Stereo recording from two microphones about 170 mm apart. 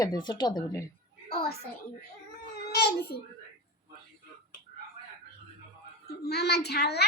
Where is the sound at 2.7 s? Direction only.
75° left (ahead or behind).